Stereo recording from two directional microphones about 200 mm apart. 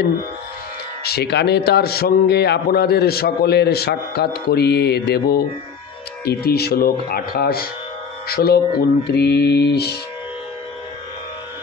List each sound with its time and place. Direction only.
1.0 s a man's voice: 55° left (ahead or behind)